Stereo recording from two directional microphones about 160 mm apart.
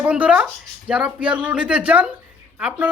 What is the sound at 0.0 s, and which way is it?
Speech, 5° right (ahead or behind).